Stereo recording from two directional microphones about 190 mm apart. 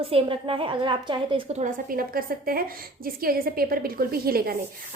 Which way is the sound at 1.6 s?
50° right (ahead or behind).